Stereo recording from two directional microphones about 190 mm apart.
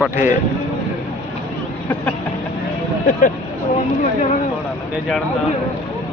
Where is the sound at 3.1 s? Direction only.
40° left (ahead or behind).